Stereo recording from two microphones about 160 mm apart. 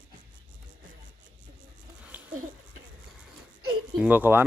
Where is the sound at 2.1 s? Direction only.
10° right (ahead or behind).